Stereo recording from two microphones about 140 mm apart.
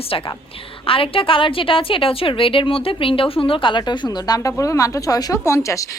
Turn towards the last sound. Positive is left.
turn(degrees=20)  # may be behind; listen again after turning